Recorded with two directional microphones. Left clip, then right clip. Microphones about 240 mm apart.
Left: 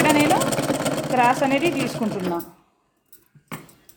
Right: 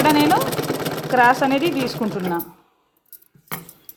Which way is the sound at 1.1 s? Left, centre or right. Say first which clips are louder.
Right 4 dB; centre.